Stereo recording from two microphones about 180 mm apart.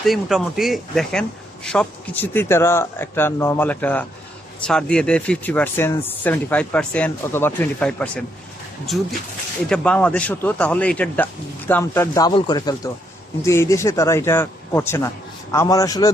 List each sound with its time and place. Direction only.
0.0 s a man's voice: centre (ahead or behind)
9.6 s speech: 5° left (ahead or behind)